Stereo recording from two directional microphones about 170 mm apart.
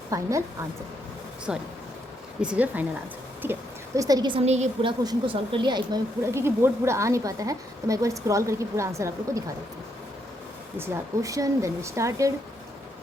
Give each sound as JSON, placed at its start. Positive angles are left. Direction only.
{"t": 0.1, "sound": "speech", "side_deg": -20}
{"t": 1.5, "sound": "a woman's voice", "side_deg": -5}
{"t": 4.4, "sound": "a woman's voice", "side_deg": -40}
{"t": 4.9, "sound": "speech", "side_deg": -30}
{"t": 10.8, "sound": "speech", "side_deg": -20}